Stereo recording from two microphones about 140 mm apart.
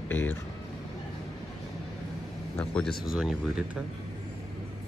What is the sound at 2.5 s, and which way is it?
Speech, 5° left (ahead or behind).